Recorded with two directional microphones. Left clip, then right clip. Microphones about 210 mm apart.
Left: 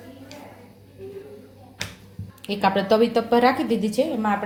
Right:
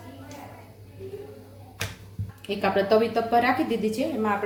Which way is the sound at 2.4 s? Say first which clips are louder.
Left 2 dB; 40° left (ahead or behind).